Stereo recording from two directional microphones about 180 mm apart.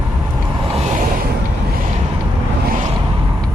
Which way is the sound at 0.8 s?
40° right (ahead or behind).